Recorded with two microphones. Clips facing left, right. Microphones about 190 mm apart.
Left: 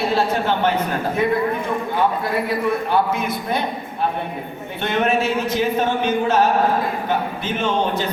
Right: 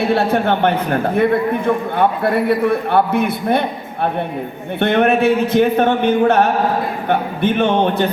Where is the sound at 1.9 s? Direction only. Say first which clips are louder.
Right 2 dB; 60° right (ahead or behind).